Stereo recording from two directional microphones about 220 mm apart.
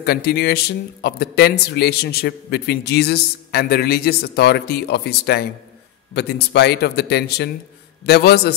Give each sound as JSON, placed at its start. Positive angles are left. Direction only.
{"t": 0.0, "sound": "a man's voice", "side_deg": 45}